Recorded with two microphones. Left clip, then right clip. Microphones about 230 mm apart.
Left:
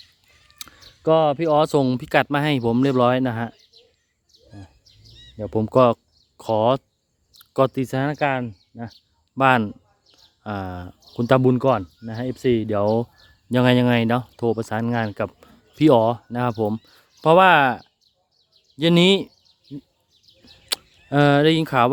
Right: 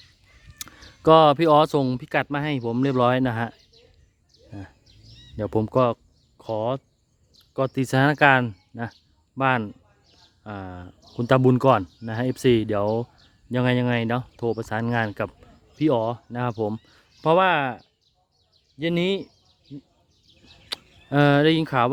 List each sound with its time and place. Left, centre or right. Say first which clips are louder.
0.6 s a sound: right 3 dB; centre
1.5 s speech: left 1 dB; centre
5.4 s speech: even; centre
5.6 s speech: left 7 dB; centre
7.3 s a sound: left 6 dB; centre
7.7 s speech: right 3 dB; centre
9.3 s speech: left 5 dB; centre
13.5 s speech: left 5 dB; centre
15.4 s speech: left 6 dB; centre
20.7 s speech: left 5 dB; centre